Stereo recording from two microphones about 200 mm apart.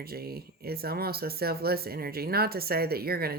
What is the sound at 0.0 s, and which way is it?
Speech, 50° right (ahead or behind).